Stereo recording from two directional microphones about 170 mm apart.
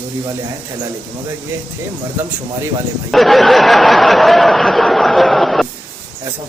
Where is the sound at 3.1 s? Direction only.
Centre (ahead or behind).